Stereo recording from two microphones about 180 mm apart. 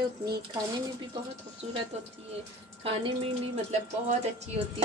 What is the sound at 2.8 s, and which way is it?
Speech, 30° right (ahead or behind).